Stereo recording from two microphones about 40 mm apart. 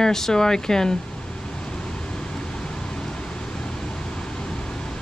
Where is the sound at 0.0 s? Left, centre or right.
Centre.